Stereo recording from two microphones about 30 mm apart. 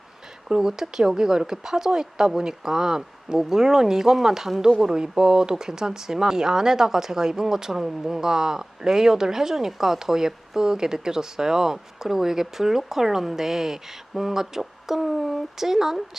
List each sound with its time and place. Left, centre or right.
0.4 s speech: centre